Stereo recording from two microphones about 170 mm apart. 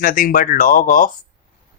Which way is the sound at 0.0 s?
50° left (ahead or behind).